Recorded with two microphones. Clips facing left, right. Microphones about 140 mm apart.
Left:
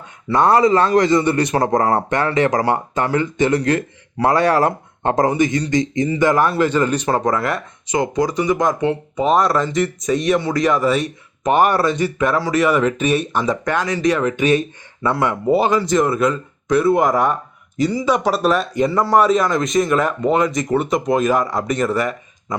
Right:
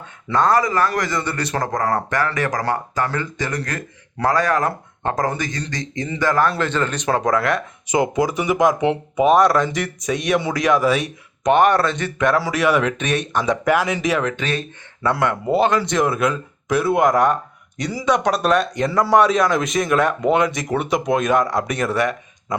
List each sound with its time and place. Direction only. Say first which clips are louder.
0.3 s a man's voice: left 4 dB; 20° left (ahead or behind); by 7.6 s centre (ahead or behind)
7.9 s speech: even; 15° right (ahead or behind); by 13.6 s 5° left (ahead or behind)
13.7 s speech: even; 10° right (ahead or behind)
14.3 s a man's voice: left 7 dB; 15° left (ahead or behind)